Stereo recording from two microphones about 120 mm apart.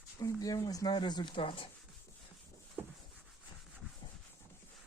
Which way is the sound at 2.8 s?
20° right (ahead or behind).